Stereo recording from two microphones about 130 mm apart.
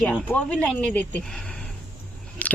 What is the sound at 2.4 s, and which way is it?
Chewing, 10° left (ahead or behind).